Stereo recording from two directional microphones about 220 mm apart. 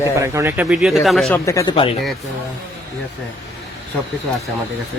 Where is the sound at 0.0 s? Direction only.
15° right (ahead or behind).